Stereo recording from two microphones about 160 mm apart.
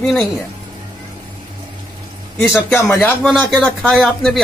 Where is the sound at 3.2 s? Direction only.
Centre (ahead or behind).